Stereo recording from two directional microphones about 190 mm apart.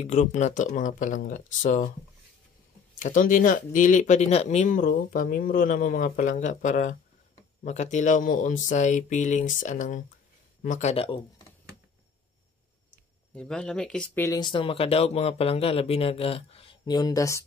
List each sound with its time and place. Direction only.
0.0 s speech: 40° left (ahead or behind)
3.0 s speech: 45° left (ahead or behind); by 11.4 s 30° left (ahead or behind)
13.3 s speech: 5° left (ahead or behind)